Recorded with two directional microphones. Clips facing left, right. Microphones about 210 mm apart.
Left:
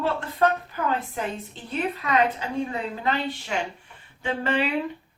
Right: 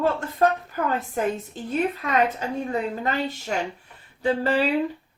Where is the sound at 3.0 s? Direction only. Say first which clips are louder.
Right 1 dB; 45° right (ahead or behind).